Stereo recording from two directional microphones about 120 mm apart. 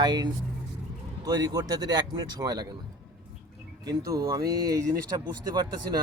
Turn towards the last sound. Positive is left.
turn(degrees=-35)  # may be behind; listen again after turning